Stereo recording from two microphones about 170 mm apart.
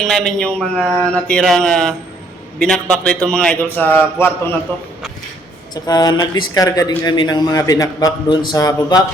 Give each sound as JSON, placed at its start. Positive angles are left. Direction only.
{"t": 0.0, "sound": "a man's voice", "side_deg": 0}
{"t": 5.7, "sound": "a man's voice", "side_deg": 25}